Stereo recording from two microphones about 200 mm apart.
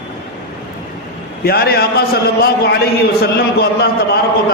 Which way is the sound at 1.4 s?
50° left (ahead or behind).